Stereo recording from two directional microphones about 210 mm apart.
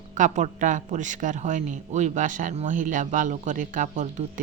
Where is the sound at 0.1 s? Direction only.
35° right (ahead or behind).